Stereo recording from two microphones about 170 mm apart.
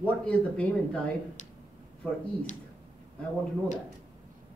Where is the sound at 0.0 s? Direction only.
10° left (ahead or behind).